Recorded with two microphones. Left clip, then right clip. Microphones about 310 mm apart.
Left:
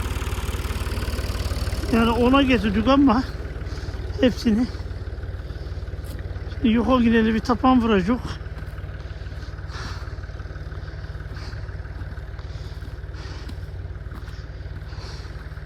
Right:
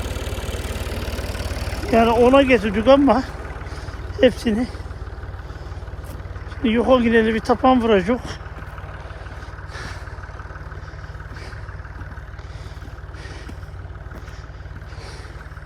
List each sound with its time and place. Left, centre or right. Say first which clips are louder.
0.2 s vehicle: right 2 dB; centre
1.9 s speech: right 6 dB; centre
3.7 s vehicle: right 2 dB; centre
6.6 s speech: right 4 dB; centre
9.7 s vehicle: right 2 dB; centre